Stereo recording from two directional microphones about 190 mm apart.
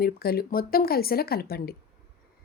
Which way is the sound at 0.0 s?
55° left (ahead or behind).